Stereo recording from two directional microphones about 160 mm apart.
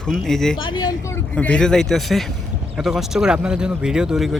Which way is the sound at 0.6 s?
30° left (ahead or behind).